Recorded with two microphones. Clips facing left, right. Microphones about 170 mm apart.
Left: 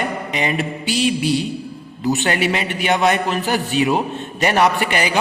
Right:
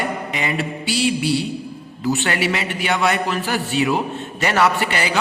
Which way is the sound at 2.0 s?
20° left (ahead or behind).